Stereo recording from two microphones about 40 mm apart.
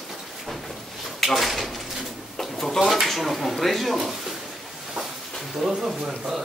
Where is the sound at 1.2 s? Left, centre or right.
Centre.